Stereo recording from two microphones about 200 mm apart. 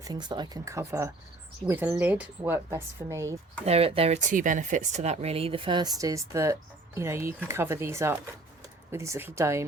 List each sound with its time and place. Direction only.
0.0 s speech: 20° right (ahead or behind)
3.7 s speech: 30° right (ahead or behind)